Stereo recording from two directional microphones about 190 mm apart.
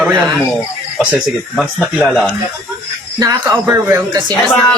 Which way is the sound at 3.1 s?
15° right (ahead or behind).